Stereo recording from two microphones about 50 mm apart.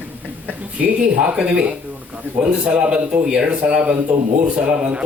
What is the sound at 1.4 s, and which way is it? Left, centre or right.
Speech, centre.